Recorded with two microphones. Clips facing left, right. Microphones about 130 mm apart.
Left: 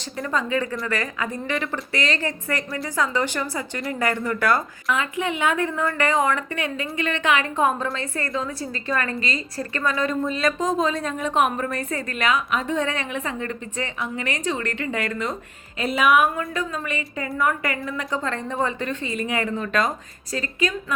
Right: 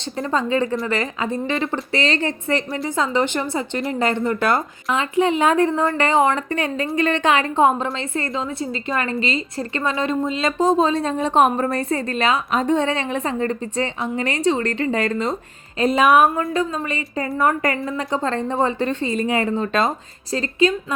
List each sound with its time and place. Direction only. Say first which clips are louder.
0.0 s a woman's voice: right 4 dB; 30° right (ahead or behind)
17.7 s a woman's voice: right 4 dB; 30° right (ahead or behind)